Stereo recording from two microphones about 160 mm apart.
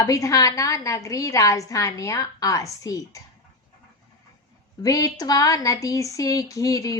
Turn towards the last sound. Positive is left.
turn(degrees=20)  # may be behind; listen again after turning